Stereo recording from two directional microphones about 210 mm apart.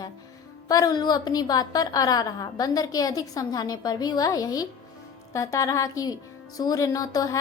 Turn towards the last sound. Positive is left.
turn(degrees=15)  # may be behind; listen again after turning